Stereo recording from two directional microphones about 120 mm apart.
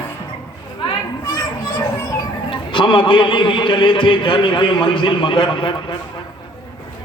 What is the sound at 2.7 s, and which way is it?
A man's voice, 45° left (ahead or behind).